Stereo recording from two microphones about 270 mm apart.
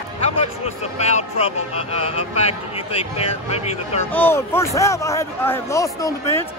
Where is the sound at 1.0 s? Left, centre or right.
Left.